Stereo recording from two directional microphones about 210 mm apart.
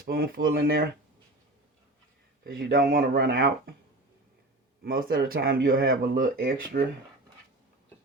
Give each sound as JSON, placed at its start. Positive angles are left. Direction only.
{"t": 0.0, "sound": "speech", "side_deg": -45}
{"t": 2.4, "sound": "speech", "side_deg": -45}
{"t": 4.8, "sound": "speech", "side_deg": -45}